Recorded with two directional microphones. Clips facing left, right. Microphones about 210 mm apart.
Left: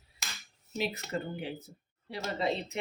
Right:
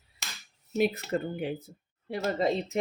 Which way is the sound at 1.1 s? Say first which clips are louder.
Right 5 dB; 55° right (ahead or behind).